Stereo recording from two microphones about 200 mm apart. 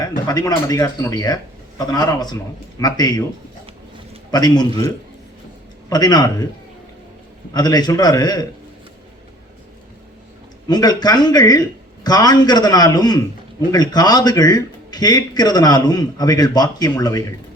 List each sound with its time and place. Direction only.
0.3 s a man's voice: 20° left (ahead or behind)
4.3 s a man's voice: 20° left (ahead or behind)
5.9 s a man's voice: 20° left (ahead or behind)
7.5 s a man's voice: 20° left (ahead or behind)
10.7 s a man's voice: 20° left (ahead or behind)